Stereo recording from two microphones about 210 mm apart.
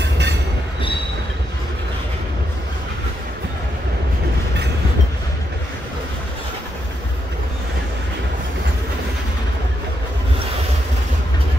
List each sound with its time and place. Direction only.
0.0 s train: 55° right (ahead or behind)